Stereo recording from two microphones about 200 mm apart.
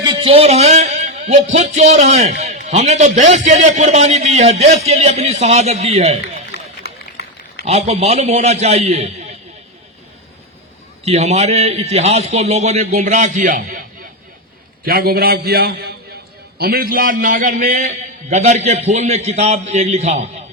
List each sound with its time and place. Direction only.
0.0 s a man's voice: 25° right (ahead or behind)
6.8 s run: 55° left (ahead or behind)
7.6 s a man's voice: 30° right (ahead or behind)
11.0 s a man's voice: 35° right (ahead or behind)
14.8 s a man's voice: 50° right (ahead or behind); by 20.2 s 35° right (ahead or behind)